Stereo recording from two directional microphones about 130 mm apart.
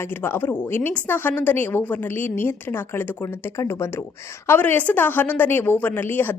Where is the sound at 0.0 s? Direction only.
15° left (ahead or behind).